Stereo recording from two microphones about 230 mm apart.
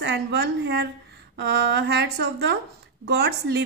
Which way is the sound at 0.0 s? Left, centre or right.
Right.